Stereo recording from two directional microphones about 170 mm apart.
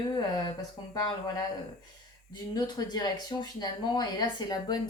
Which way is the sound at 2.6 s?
25° left (ahead or behind).